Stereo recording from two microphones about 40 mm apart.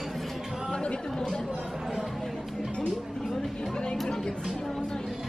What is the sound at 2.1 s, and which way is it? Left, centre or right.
Chatter, centre.